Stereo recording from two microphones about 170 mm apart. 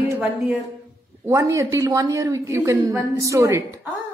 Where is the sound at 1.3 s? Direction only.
15° right (ahead or behind).